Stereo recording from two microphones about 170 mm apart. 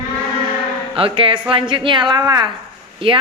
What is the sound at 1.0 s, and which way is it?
A woman's voice, 30° right (ahead or behind).